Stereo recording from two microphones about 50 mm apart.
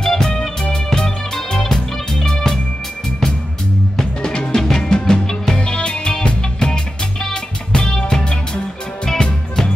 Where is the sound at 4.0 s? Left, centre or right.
Centre.